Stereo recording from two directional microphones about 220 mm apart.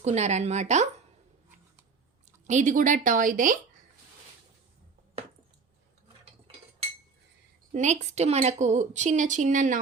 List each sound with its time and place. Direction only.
0.0 s a woman's voice: 30° right (ahead or behind)
2.5 s a woman's voice: 35° right (ahead or behind)
7.7 s a woman's voice: 35° right (ahead or behind)